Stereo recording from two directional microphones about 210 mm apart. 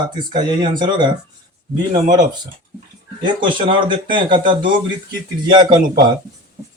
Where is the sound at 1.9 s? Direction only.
35° right (ahead or behind).